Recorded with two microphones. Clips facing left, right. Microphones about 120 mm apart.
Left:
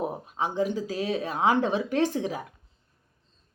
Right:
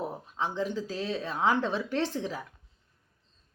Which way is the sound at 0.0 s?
10° left (ahead or behind).